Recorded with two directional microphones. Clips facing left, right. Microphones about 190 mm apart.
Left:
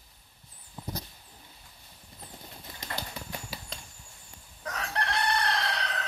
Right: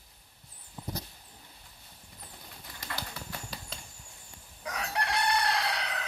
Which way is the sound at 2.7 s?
20° left (ahead or behind).